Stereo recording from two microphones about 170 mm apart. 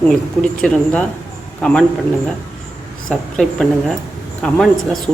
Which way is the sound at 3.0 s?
5° left (ahead or behind).